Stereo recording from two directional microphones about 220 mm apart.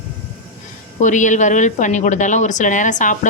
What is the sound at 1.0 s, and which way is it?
A woman's voice, 35° left (ahead or behind).